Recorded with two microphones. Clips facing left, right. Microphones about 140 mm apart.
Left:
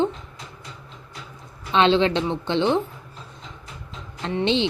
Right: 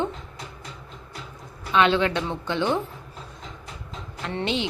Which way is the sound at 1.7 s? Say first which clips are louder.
Left 2 dB; 25° left (ahead or behind).